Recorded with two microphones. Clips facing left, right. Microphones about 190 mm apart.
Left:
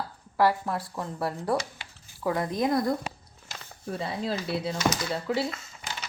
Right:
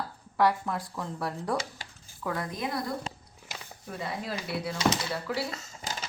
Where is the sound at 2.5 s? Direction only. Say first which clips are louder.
Left 8 dB; 40° left (ahead or behind).